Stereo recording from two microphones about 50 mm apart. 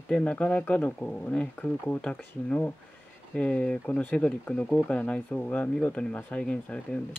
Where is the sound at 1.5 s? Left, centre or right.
Left.